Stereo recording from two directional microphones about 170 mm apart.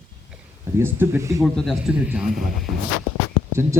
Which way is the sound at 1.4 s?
Centre (ahead or behind).